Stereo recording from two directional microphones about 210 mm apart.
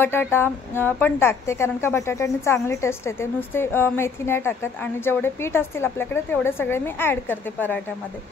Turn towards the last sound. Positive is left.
turn(degrees=10)  # may be behind; listen again after turning